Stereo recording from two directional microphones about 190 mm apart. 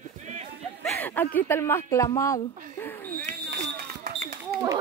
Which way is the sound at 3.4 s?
50° right (ahead or behind).